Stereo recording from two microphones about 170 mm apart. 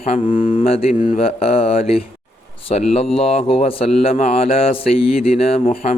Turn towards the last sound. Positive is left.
turn(degrees=35)  # may be behind; listen again after turning